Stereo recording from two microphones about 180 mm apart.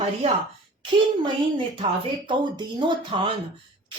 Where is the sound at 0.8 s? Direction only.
25° right (ahead or behind).